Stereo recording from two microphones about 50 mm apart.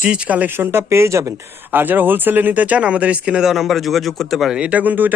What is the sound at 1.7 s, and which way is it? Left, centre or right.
Speech, right.